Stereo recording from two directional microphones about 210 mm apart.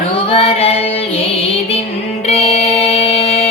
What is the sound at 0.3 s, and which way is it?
Music, 30° left (ahead or behind).